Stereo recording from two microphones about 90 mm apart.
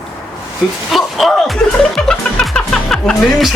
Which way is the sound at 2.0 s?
5° left (ahead or behind).